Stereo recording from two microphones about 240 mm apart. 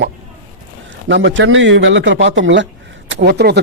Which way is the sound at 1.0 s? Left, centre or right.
Right.